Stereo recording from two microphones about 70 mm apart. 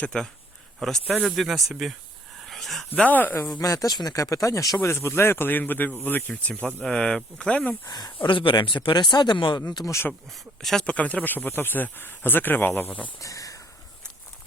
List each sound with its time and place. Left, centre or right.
0.0 s speech: centre
2.4 s a sound: centre
2.9 s speech: left
3.6 s speech: left
4.8 s speech: left
6.8 s speech: centre
7.9 s speech: left
10.6 s speech: centre
10.8 s speech: centre
13.1 s a sound: left